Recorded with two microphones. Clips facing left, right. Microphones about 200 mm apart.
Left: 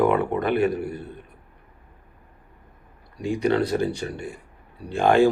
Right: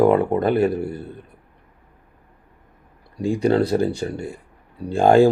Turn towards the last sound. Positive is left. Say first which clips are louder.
# right 4 dB
turn(degrees=-30)  # may be behind; listen again after turning